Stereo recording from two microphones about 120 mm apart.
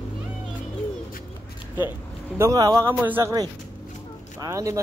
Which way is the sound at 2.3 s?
25° right (ahead or behind).